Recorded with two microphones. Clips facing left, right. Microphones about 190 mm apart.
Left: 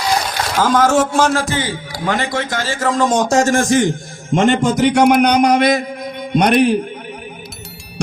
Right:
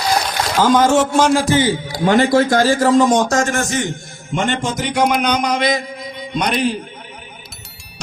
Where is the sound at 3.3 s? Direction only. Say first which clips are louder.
Left 5 dB; 35° left (ahead or behind).